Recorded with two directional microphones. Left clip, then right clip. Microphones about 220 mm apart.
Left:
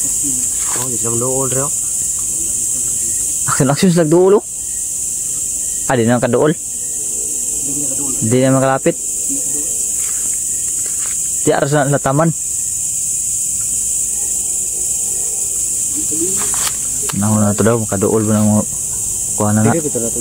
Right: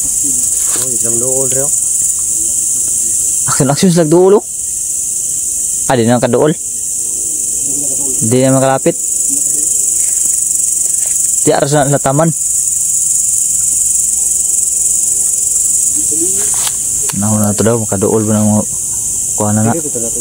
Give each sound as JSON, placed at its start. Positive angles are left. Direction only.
{"t": 1.3, "sound": "cricket", "side_deg": 50}
{"t": 3.4, "sound": "speech", "side_deg": -5}
{"t": 5.9, "sound": "speech", "side_deg": -10}
{"t": 8.3, "sound": "speech", "side_deg": -10}
{"t": 11.4, "sound": "speech", "side_deg": -10}
{"t": 17.1, "sound": "speech", "side_deg": 0}